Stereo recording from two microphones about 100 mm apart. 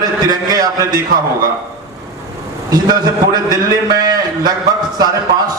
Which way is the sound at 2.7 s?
40° right (ahead or behind).